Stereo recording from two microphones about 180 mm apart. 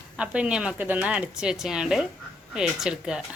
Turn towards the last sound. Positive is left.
turn(degrees=-5)  # may be behind; listen again after turning